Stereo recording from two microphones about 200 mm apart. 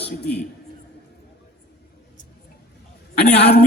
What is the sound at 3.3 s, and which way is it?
Speech, 55° left (ahead or behind).